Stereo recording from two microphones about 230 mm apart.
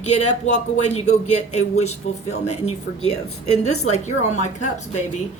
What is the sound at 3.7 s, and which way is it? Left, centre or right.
Speech, left.